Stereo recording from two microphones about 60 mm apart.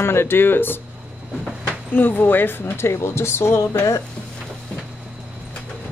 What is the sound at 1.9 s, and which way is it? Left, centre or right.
Speech, left.